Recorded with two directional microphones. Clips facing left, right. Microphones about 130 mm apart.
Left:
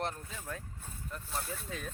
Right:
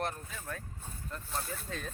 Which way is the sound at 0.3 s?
15° left (ahead or behind).